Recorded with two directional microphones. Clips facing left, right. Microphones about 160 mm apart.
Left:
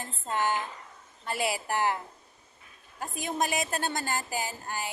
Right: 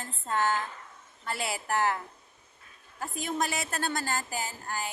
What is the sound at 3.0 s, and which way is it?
A woman's voice, 20° left (ahead or behind).